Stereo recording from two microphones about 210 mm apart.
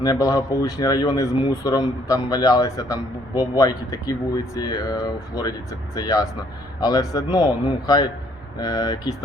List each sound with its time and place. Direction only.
0.0 s speech: 15° left (ahead or behind)